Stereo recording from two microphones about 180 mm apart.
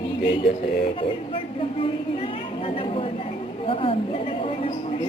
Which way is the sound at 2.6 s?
30° left (ahead or behind).